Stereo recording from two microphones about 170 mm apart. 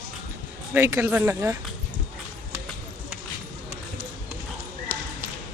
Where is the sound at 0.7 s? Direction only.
15° right (ahead or behind).